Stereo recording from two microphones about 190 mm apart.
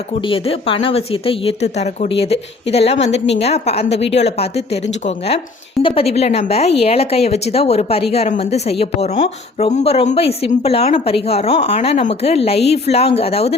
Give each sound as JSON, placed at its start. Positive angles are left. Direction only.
{"t": 0.3, "sound": "speech", "side_deg": 30}